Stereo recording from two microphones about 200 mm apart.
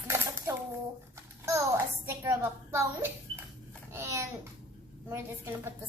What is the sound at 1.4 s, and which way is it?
A child's voice, 15° right (ahead or behind).